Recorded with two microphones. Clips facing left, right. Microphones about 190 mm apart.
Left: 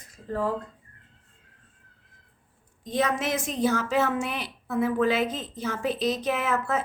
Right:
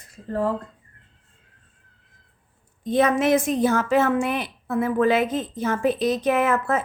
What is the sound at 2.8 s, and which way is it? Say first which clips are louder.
A woman's voice: right 7 dB; 55° right (ahead or behind).